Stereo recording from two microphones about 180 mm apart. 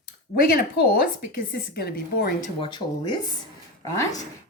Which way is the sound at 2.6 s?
25° left (ahead or behind).